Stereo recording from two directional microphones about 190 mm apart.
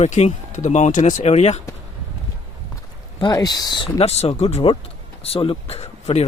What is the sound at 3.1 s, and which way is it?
Speech, 20° left (ahead or behind).